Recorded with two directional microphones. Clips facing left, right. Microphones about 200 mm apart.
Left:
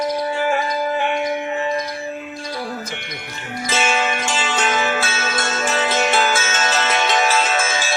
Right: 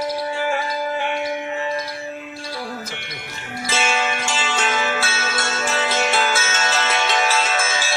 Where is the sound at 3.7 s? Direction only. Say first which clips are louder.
Left 2 dB; 20° left (ahead or behind).